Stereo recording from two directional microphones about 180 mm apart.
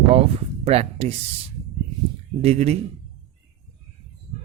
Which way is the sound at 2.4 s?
35° right (ahead or behind).